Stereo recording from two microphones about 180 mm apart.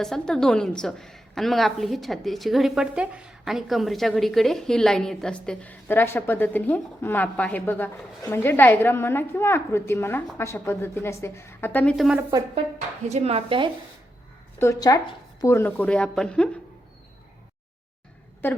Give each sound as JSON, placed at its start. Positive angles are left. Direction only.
{"t": 0.0, "sound": "a woman's voice", "side_deg": 5}
{"t": 13.1, "sound": "speech", "side_deg": -35}
{"t": 14.6, "sound": "a woman's voice", "side_deg": 15}